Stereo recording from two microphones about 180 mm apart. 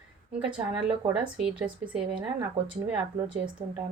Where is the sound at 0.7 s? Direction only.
5° right (ahead or behind).